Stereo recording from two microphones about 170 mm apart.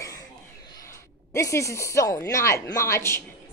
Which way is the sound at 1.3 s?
15° left (ahead or behind).